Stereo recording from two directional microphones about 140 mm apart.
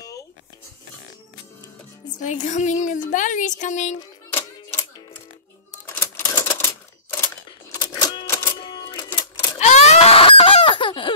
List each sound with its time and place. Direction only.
2.0 s a woman's voice: 65° left (ahead or behind)
4.3 s typewriter: 15° left (ahead or behind)
5.9 s typewriter: 20° left (ahead or behind)
7.7 s typewriter: 30° left (ahead or behind)
8.5 s cash register: 35° left (ahead or behind)
9.6 s a sound: 55° left (ahead or behind); by 11.1 s 35° left (ahead or behind)